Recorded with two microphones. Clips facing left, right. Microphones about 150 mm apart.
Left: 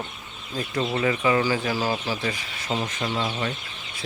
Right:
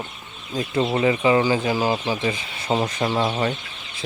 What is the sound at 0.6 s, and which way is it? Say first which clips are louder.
Speech: right 4 dB; 25° right (ahead or behind).